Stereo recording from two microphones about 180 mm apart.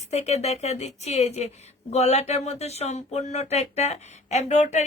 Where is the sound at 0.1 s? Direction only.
35° left (ahead or behind).